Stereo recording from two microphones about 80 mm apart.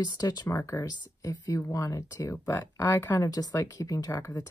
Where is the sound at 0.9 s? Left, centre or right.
Left.